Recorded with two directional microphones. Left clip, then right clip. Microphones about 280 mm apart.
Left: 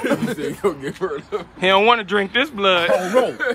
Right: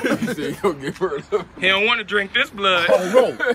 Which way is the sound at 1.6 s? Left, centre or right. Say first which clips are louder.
Left 4 dB; centre.